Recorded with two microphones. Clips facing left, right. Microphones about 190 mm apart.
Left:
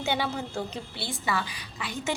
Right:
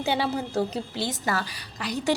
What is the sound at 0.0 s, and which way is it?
A woman's voice, 35° right (ahead or behind).